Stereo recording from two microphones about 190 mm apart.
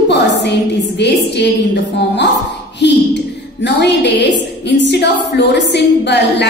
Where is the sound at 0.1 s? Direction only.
65° left (ahead or behind).